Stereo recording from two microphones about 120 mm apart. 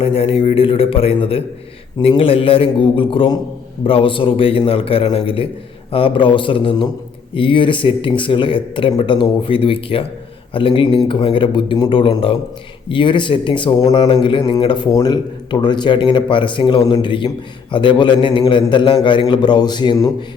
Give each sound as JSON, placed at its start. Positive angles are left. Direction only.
{"t": 0.0, "sound": "speech", "side_deg": 50}
{"t": 14.8, "sound": "speech", "side_deg": 30}